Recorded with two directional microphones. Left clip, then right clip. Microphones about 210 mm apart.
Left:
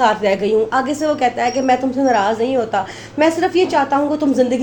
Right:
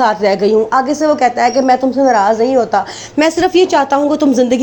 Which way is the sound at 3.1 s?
40° right (ahead or behind).